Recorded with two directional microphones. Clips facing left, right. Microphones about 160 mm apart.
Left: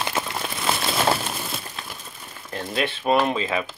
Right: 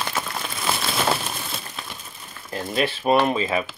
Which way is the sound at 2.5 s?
5° right (ahead or behind).